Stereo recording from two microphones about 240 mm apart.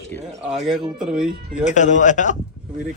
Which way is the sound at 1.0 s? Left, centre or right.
Centre.